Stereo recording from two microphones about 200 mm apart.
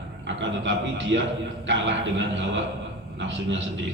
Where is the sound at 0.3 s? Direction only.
65° right (ahead or behind).